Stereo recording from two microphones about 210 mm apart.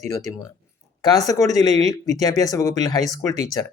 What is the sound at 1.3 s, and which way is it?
Speech, 15° left (ahead or behind).